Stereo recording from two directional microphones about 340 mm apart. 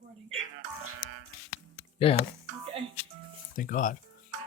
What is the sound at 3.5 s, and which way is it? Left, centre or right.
Speech, left.